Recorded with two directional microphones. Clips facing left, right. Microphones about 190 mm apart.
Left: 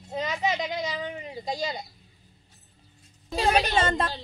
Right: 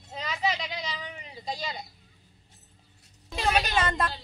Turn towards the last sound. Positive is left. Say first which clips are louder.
# left 3 dB
turn(degrees=25)  # may be behind; listen again after turning